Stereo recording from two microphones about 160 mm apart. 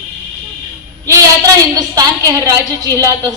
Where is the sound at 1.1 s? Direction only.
20° right (ahead or behind).